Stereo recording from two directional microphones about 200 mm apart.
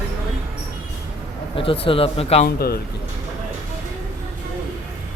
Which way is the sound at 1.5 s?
25° left (ahead or behind).